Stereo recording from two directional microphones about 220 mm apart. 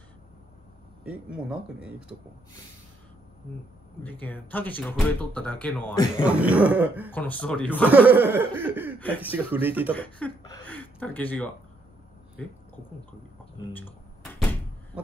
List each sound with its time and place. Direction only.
1.0 s speech: 5° right (ahead or behind)
4.0 s speech: 10° left (ahead or behind)
6.2 s chuckle: 5° right (ahead or behind)
7.2 s speech: 5° left (ahead or behind)
7.8 s chuckle: 10° right (ahead or behind)
9.9 s speech: 5° left (ahead or behind)
13.7 s a sound: 10° left (ahead or behind)